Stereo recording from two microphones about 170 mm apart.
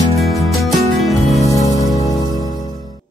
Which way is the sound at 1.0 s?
Centre (ahead or behind).